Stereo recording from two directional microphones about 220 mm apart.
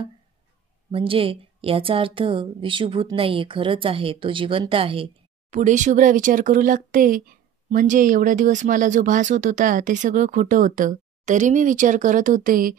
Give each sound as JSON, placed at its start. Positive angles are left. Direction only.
{"t": 0.9, "sound": "a woman's voice", "side_deg": -25}